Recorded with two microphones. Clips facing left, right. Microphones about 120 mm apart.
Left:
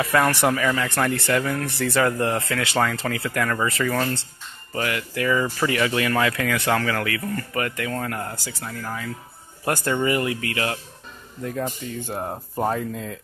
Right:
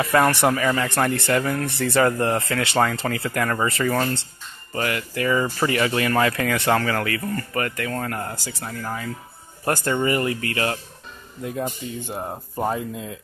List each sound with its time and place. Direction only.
0.0 s speech: 5° right (ahead or behind)
0.6 s speech: 10° right (ahead or behind)
0.8 s speech: 20° right (ahead or behind)
1.1 s speech: 5° right (ahead or behind)
3.3 s speech: 15° right (ahead or behind)
4.7 s speech: centre (ahead or behind)
5.3 s speech: 15° right (ahead or behind)
8.6 s speech: 10° right (ahead or behind)
10.0 s speech: 5° left (ahead or behind)
11.4 s speech: 10° right (ahead or behind)
12.1 s speech: centre (ahead or behind)